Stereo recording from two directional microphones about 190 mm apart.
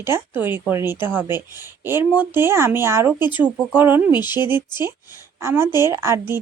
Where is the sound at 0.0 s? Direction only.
10° right (ahead or behind).